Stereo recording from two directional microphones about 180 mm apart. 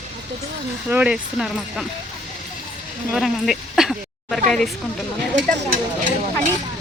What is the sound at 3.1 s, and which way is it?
Speech, centre (ahead or behind).